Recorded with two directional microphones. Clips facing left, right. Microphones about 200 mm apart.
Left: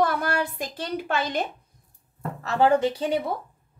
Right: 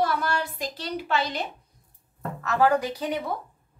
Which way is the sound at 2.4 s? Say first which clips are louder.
Left 2 dB; 25° left (ahead or behind).